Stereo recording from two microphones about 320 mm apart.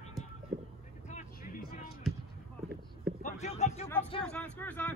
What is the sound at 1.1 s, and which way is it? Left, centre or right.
Vehicle, left.